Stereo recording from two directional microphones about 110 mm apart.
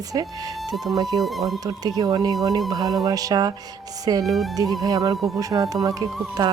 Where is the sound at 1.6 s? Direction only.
35° right (ahead or behind).